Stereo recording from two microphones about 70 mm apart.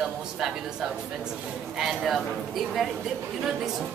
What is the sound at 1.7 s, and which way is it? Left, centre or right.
Speech, centre.